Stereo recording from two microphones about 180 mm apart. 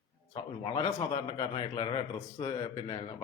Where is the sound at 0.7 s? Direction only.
30° left (ahead or behind).